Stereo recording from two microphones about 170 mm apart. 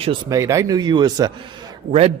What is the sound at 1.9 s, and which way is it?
Speech, 35° right (ahead or behind).